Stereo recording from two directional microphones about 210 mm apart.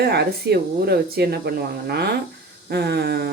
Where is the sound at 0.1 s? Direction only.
50° right (ahead or behind).